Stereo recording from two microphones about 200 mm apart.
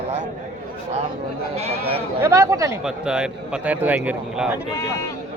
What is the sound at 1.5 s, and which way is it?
Speech, 30° right (ahead or behind).